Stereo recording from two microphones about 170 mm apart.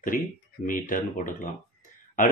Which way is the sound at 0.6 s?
50° left (ahead or behind).